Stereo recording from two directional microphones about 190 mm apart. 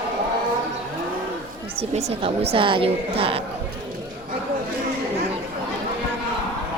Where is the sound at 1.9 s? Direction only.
35° right (ahead or behind).